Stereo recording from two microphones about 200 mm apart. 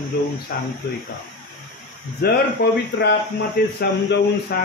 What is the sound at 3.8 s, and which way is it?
Speech, 50° left (ahead or behind).